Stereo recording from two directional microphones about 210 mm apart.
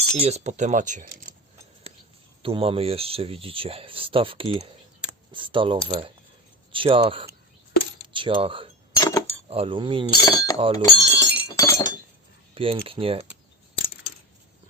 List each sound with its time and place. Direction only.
0.2 s speech: 30° right (ahead or behind)
2.4 s speech: 25° right (ahead or behind)
8.9 s chink: 15° left (ahead or behind)
9.5 s speech: 25° right (ahead or behind)
10.1 s speech: 15° left (ahead or behind)
10.6 s speech: 25° right (ahead or behind)
11.0 s chink: 15° left (ahead or behind)
12.5 s speech: 25° right (ahead or behind)